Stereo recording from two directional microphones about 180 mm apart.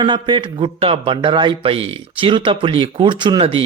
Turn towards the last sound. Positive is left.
turn(degrees=-30)  # may be behind; listen again after turning